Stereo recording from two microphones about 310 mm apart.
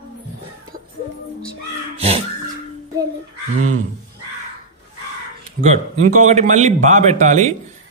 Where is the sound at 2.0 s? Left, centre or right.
Centre.